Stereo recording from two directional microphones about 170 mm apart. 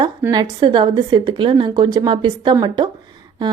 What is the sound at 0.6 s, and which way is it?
A woman's voice, 30° right (ahead or behind).